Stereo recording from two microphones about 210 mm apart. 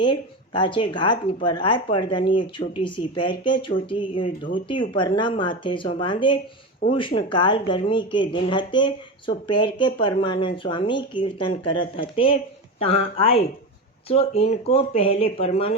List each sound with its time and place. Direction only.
0.0 s speech: 20° left (ahead or behind)